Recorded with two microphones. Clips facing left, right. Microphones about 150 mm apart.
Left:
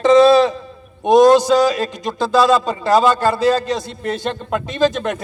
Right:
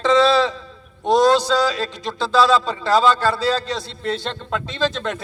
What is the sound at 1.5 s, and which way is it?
Speech, 20° left (ahead or behind).